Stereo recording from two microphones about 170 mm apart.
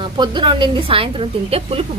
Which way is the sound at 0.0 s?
30° right (ahead or behind).